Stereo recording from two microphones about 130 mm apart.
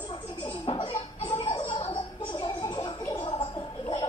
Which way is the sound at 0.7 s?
40° left (ahead or behind).